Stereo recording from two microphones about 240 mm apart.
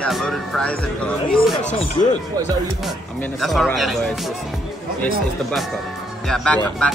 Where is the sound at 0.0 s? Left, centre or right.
Centre.